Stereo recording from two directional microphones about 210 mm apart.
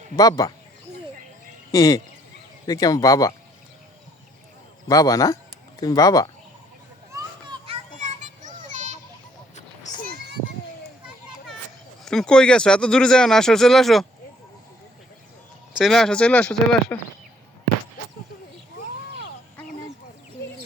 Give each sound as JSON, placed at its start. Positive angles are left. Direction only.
{"t": 0.2, "sound": "speech", "side_deg": 15}
{"t": 1.7, "sound": "speech", "side_deg": 15}
{"t": 4.9, "sound": "speech", "side_deg": 15}
{"t": 7.1, "sound": "children playing", "side_deg": -15}
{"t": 7.9, "sound": "children playing", "side_deg": -35}
{"t": 9.6, "sound": "a sound", "side_deg": 40}
{"t": 12.0, "sound": "speech", "side_deg": 5}
{"t": 15.8, "sound": "speech", "side_deg": 0}